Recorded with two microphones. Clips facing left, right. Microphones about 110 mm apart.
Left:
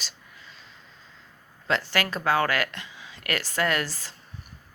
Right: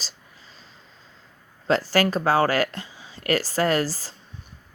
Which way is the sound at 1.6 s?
35° right (ahead or behind).